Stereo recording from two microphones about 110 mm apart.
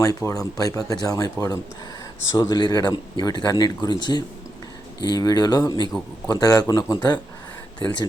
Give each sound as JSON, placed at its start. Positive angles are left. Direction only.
{"t": 0.0, "sound": "speech", "side_deg": 30}